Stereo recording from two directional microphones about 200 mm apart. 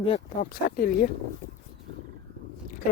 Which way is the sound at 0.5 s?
45° left (ahead or behind).